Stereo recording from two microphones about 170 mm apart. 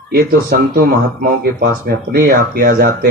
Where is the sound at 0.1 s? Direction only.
65° right (ahead or behind).